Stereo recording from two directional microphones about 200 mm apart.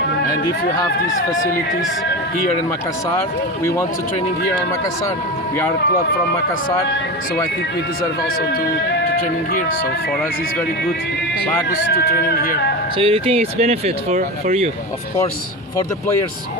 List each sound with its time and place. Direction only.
3.6 s speech: 15° left (ahead or behind)
11.9 s speech: 55° left (ahead or behind)
13.0 s speech: 30° right (ahead or behind)